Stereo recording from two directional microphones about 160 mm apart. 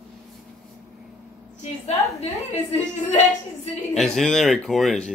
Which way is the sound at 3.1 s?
40° left (ahead or behind).